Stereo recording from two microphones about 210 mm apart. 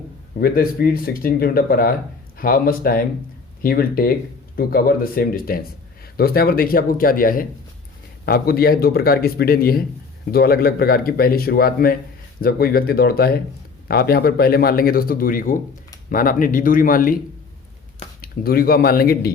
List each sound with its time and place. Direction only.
0.3 s speech: 45° left (ahead or behind)
18.2 s speech: 45° left (ahead or behind)